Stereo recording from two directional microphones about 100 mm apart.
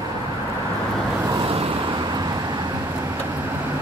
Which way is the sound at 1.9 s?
45° right (ahead or behind).